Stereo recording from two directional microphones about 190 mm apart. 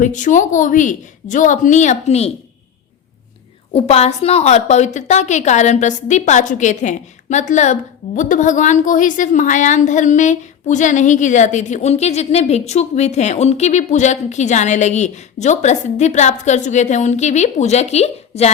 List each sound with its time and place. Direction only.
0.0 s a woman's voice: 40° left (ahead or behind)
3.7 s a woman's voice: 35° left (ahead or behind)